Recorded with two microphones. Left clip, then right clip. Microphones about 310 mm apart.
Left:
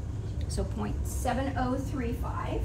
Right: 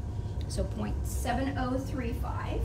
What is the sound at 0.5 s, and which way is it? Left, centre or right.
Speech, centre.